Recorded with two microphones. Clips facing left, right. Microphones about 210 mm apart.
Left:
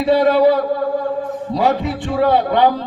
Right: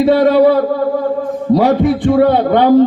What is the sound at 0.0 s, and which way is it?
Speech, 55° right (ahead or behind).